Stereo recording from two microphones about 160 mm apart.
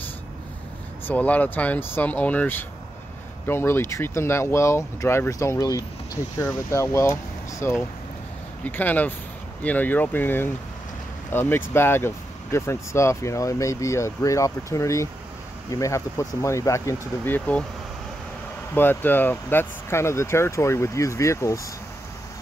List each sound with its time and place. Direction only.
1.0 s speech: 10° left (ahead or behind)
18.8 s speech: 10° left (ahead or behind)